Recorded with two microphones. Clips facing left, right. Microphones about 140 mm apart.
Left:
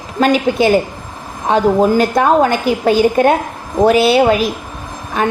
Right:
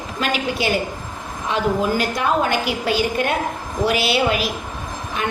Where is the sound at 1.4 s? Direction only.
45° left (ahead or behind).